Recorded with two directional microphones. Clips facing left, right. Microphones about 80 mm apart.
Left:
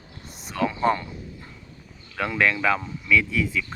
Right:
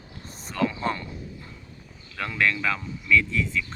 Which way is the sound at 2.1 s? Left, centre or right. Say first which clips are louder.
Left 3 dB; centre.